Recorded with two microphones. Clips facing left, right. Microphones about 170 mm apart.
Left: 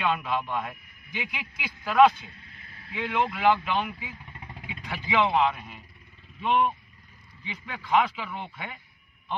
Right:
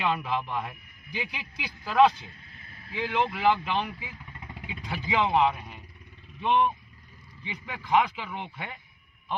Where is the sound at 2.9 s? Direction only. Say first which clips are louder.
Even; 25° right (ahead or behind).